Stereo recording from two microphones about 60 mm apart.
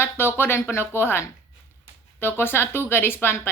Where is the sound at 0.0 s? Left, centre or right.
Left.